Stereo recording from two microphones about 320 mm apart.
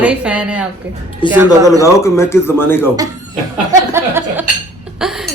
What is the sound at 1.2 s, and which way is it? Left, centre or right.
A man's voice, centre.